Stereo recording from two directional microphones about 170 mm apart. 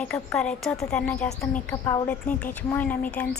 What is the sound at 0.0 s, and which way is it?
A woman's voice, 5° left (ahead or behind).